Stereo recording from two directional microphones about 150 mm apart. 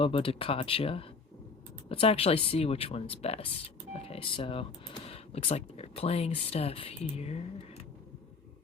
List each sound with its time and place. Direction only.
0.0 s speech: 40° left (ahead or behind)